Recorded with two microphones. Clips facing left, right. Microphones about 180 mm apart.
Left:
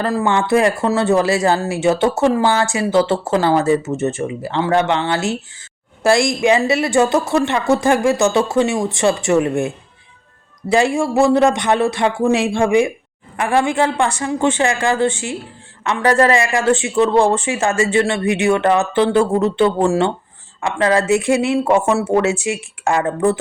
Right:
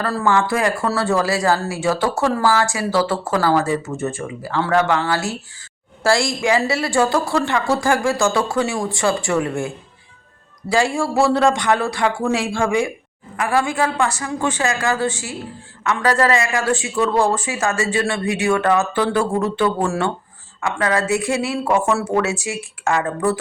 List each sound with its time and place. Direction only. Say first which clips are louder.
0.0 s speech: left 1 dB; 20° left (ahead or behind)